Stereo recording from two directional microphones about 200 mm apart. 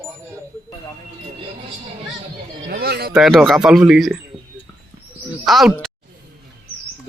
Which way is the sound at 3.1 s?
Centre (ahead or behind).